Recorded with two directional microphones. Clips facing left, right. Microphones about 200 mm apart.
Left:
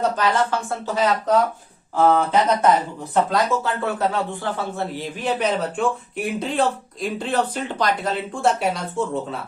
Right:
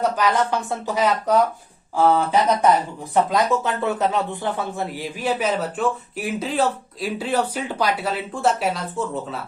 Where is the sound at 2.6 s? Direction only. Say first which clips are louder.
Even; 15° right (ahead or behind).